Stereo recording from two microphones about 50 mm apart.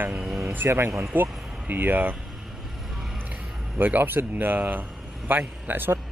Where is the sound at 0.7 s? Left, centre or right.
Right.